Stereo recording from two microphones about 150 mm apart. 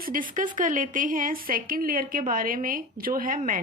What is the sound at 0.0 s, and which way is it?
A woman's voice, 65° right (ahead or behind).